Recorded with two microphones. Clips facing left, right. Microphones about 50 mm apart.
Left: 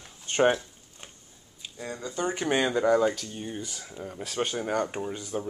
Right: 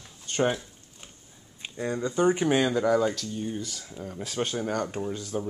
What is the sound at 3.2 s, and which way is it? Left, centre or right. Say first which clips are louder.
Speech: right 3 dB; left.